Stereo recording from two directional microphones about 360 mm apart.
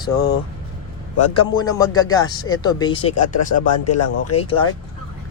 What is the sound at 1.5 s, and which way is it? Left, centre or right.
Speech, centre.